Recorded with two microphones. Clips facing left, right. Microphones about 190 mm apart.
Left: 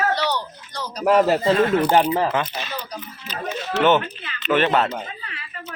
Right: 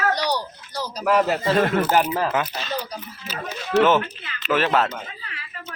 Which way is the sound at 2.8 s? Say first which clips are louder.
Right 2 dB; 10° right (ahead or behind).